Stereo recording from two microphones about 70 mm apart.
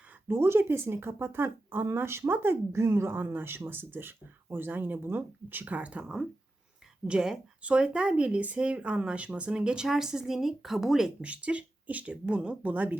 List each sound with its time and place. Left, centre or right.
0.3 s speech: right; by 11.1 s centre
11.2 s speech: centre